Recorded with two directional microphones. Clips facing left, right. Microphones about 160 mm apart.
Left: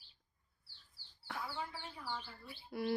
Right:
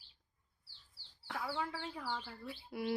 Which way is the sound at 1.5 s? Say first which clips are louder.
Right 5 dB; 90° right.